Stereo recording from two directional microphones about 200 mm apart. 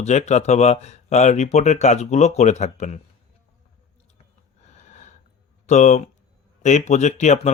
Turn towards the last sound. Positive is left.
turn(degrees=35)  # may be behind; listen again after turning